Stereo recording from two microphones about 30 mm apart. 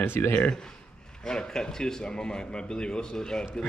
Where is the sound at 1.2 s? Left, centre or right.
Left.